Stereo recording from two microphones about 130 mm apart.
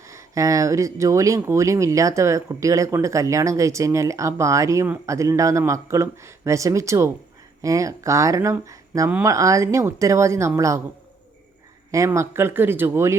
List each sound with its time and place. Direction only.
0.0 s speech: 25° right (ahead or behind)
11.9 s speech: 25° right (ahead or behind)